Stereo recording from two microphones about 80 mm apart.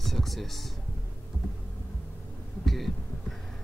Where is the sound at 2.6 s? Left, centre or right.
Centre.